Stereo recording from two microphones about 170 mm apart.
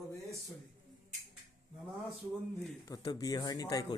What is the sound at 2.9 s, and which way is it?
A man's voice, 20° left (ahead or behind).